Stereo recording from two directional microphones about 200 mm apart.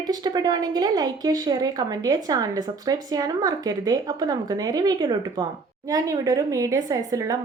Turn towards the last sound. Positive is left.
turn(degrees=-15)  # may be behind; listen again after turning